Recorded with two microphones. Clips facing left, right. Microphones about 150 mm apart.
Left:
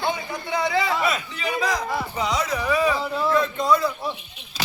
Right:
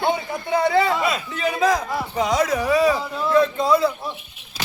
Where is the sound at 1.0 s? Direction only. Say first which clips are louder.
Right 2 dB; 30° right (ahead or behind).